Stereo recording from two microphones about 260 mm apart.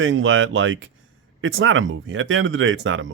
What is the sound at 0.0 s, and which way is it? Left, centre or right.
Speech, right.